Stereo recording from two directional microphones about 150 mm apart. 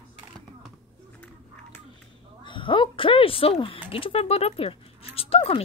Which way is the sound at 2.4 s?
35° left (ahead or behind).